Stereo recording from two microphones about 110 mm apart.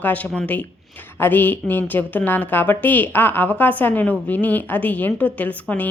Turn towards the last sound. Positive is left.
turn(degrees=15)  # may be behind; listen again after turning